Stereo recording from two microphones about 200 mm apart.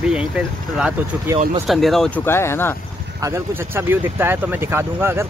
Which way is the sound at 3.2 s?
10° right (ahead or behind).